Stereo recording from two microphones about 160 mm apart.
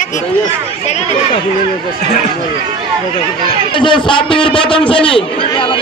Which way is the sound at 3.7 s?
30° left (ahead or behind).